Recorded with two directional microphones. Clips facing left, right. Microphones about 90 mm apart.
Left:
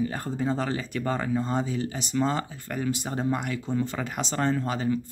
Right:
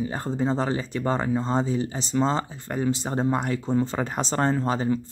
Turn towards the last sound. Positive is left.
turn(degrees=-30)  # may be behind; listen again after turning